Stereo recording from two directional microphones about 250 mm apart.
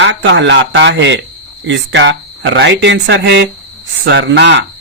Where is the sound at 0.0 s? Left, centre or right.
Right.